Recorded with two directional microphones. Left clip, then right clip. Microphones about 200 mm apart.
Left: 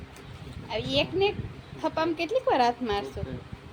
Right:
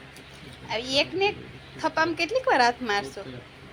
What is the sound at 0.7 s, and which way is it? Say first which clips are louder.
A woman's voice: right 2 dB; 10° left (ahead or behind).